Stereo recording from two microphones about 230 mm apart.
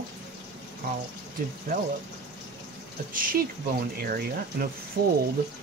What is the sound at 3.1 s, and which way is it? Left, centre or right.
Speech, right.